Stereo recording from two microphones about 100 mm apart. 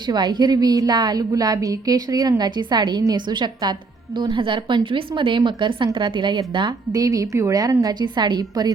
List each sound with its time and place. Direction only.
0.1 s a woman's voice: 45° right (ahead or behind)